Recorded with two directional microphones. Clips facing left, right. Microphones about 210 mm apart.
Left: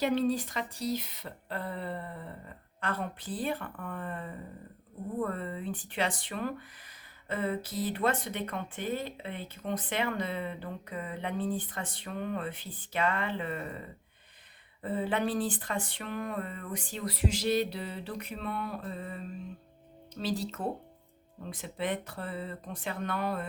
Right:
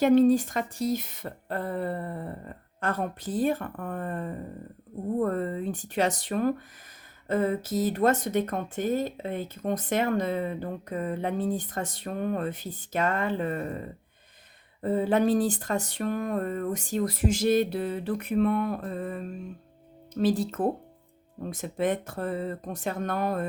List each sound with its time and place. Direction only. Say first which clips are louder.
0.0 s speech: right 9 dB; 50° right (ahead or behind)
14.8 s speech: right 7 dB; 40° right (ahead or behind)